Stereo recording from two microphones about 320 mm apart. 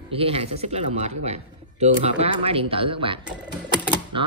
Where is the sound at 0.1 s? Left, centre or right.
Centre.